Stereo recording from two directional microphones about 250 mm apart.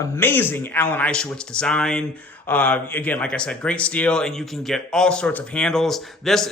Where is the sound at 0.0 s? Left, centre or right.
Centre.